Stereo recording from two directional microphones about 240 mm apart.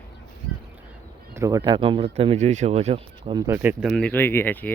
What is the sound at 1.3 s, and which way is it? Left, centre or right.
Speech, centre.